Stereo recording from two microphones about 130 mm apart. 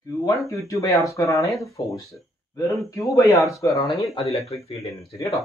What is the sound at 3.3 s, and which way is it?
Speech, centre (ahead or behind).